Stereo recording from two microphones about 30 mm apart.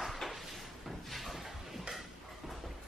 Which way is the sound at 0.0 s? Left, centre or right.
Centre.